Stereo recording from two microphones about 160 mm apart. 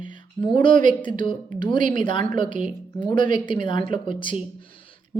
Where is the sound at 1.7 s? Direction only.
55° right (ahead or behind).